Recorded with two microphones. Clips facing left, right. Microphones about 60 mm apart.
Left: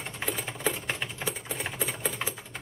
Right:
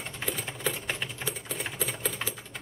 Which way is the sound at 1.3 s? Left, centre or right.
Centre.